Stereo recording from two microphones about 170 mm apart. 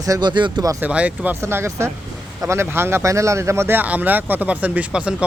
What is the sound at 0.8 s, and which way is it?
Speech, 10° right (ahead or behind).